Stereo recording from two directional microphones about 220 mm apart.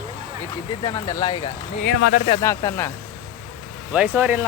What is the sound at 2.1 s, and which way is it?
Speech, 30° left (ahead or behind).